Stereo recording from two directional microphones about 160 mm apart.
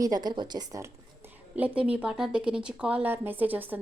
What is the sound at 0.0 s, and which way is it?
A woman's voice, 25° right (ahead or behind).